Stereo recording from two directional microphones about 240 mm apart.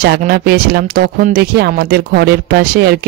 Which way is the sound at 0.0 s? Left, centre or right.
Right.